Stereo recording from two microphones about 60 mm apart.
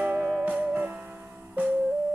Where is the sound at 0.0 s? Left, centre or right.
Right.